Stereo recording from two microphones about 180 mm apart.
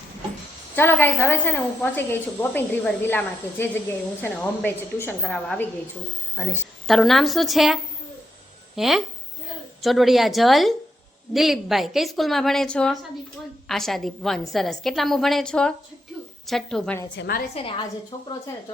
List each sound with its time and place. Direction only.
0.8 s a woman's voice: 10° left (ahead or behind)
17.2 s a woman's voice: 60° left (ahead or behind)
17.5 s a woman's voice: 30° left (ahead or behind)